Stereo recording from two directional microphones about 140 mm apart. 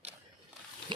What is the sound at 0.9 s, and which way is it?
Speech, 35° right (ahead or behind).